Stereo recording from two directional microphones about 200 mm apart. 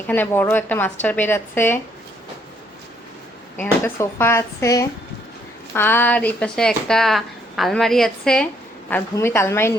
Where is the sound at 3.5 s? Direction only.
10° left (ahead or behind).